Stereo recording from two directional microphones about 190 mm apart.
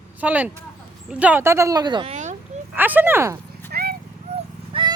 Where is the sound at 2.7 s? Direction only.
10° right (ahead or behind).